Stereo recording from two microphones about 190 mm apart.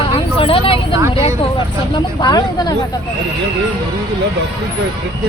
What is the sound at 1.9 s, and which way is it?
Speech, 20° left (ahead or behind).